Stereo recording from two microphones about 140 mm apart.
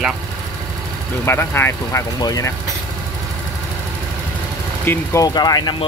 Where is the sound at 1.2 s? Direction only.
15° left (ahead or behind).